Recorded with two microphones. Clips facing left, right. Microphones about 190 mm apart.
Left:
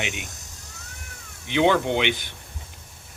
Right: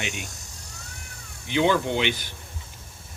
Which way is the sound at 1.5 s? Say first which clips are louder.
Left 2 dB; 65° left (ahead or behind).